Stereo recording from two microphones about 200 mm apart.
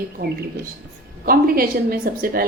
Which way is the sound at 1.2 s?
45° right (ahead or behind).